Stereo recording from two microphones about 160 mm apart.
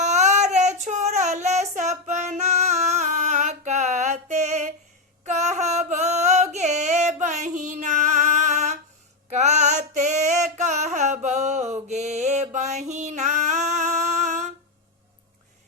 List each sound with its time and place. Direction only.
0.0 s child singing: 45° right (ahead or behind)
5.2 s a sound: 45° right (ahead or behind)
9.3 s female singing: 45° right (ahead or behind)